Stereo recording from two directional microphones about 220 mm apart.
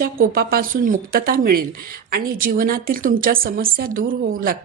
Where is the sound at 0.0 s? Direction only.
40° right (ahead or behind).